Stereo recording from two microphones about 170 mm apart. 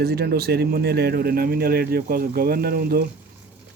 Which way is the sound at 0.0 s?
70° right (ahead or behind).